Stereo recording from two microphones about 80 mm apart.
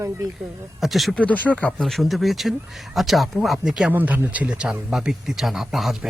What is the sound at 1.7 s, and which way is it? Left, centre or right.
Speech, centre.